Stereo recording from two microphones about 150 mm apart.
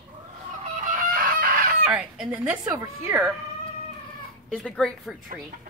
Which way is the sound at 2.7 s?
25° right (ahead or behind).